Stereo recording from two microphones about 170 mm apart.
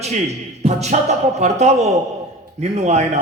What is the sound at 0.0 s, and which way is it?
A man's voice, 40° right (ahead or behind).